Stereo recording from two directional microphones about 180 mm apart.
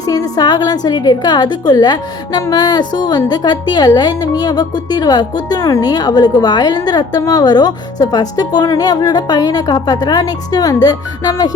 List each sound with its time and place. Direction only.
0.0 s a woman's voice: 20° left (ahead or behind)